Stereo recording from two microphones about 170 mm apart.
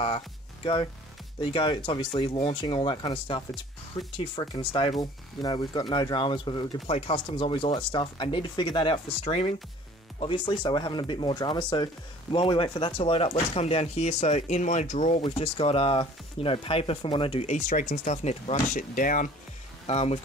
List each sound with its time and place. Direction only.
1.4 s speech: 30° left (ahead or behind)
17.6 s speech: 55° left (ahead or behind)
19.9 s speech: 40° left (ahead or behind)